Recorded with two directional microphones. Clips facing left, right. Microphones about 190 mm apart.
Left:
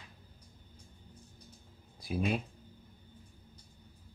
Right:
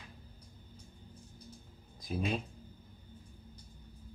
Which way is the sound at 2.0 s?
10° left (ahead or behind).